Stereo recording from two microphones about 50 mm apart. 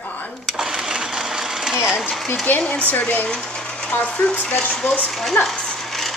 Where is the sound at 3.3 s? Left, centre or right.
Centre.